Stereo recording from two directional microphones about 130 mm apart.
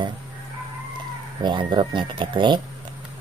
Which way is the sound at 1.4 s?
35° right (ahead or behind).